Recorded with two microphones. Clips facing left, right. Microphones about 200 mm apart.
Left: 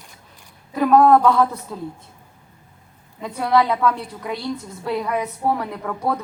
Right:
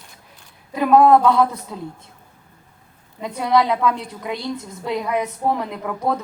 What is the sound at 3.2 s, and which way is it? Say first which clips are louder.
Speech: even; 5° right (ahead or behind).